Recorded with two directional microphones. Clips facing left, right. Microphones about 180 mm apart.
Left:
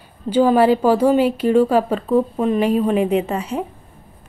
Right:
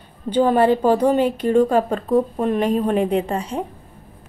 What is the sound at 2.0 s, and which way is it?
Speech, 10° right (ahead or behind).